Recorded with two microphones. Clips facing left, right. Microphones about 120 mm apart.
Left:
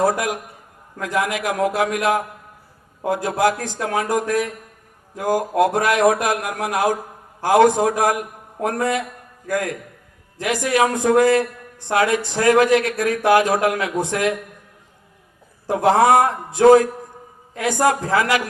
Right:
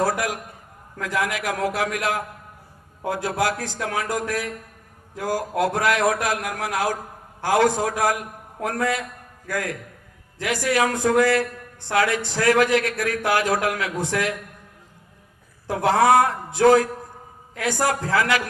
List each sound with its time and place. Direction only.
0.0 s a man's voice: 20° left (ahead or behind)
15.6 s speech: 20° left (ahead or behind)